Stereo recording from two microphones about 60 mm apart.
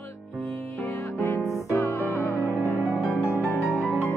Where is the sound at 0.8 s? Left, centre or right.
Left.